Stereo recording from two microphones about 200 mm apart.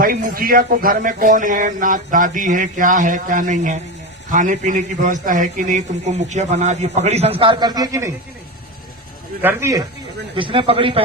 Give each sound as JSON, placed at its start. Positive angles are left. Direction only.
{"t": 0.0, "sound": "a man's voice", "side_deg": -45}
{"t": 9.4, "sound": "speech", "side_deg": -10}
{"t": 10.3, "sound": "a man's voice", "side_deg": -25}